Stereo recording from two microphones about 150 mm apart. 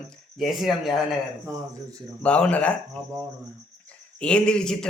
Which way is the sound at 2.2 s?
5° left (ahead or behind).